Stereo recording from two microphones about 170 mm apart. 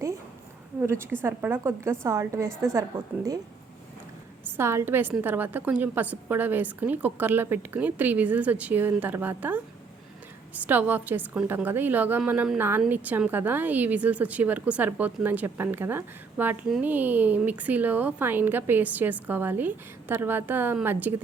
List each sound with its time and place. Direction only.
1.2 s a woman's voice: 10° right (ahead or behind)
4.5 s a woman's voice: 15° right (ahead or behind)